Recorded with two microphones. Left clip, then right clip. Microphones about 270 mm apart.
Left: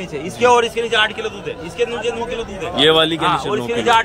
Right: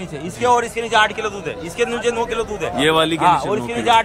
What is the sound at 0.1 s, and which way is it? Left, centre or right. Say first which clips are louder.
A man's voice: left 3 dB; right.